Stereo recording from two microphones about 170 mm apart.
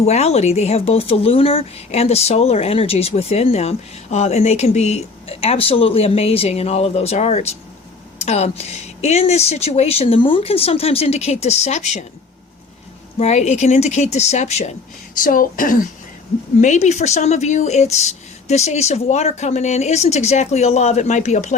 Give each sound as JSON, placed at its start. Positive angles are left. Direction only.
{"t": 0.0, "sound": "speech", "side_deg": 40}
{"t": 13.1, "sound": "speech", "side_deg": 40}
{"t": 15.2, "sound": "speech", "side_deg": 55}
{"t": 16.6, "sound": "speech", "side_deg": 45}